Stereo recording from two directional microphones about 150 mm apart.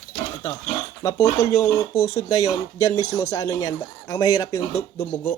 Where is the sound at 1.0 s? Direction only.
25° left (ahead or behind).